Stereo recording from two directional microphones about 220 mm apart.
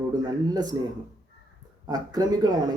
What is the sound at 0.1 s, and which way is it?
Speech, 15° right (ahead or behind).